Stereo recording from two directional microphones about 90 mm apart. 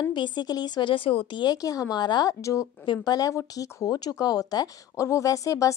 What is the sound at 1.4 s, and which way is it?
A woman's voice, 45° left (ahead or behind).